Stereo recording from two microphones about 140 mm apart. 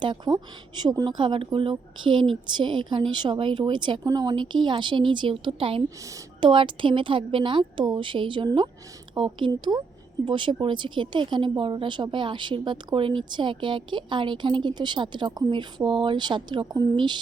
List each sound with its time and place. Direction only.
0.0 s speech: 30° right (ahead or behind)
6.0 s speech: 20° right (ahead or behind)
6.4 s speech: 35° right (ahead or behind)